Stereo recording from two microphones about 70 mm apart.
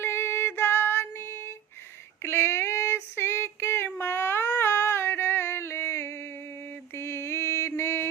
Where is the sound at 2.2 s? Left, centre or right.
Left.